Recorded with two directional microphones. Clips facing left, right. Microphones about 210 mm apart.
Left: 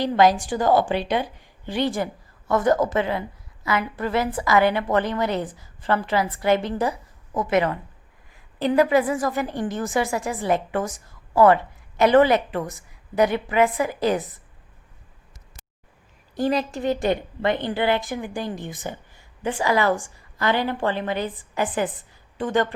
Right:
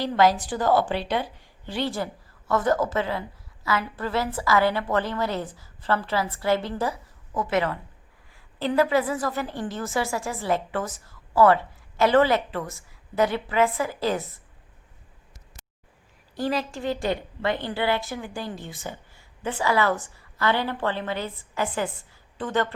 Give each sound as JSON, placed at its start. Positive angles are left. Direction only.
{"t": 0.0, "sound": "a woman's voice", "side_deg": 15}
{"t": 16.4, "sound": "a woman's voice", "side_deg": 20}